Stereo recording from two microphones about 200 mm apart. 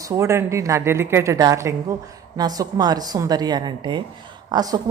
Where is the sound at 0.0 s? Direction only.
15° right (ahead or behind).